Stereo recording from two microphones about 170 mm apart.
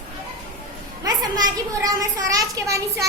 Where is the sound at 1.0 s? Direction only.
25° right (ahead or behind).